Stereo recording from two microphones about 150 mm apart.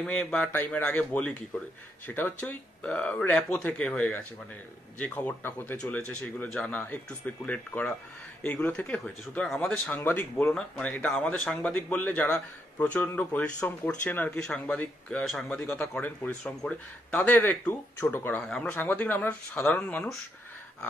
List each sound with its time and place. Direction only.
0.0 s speech: 5° left (ahead or behind)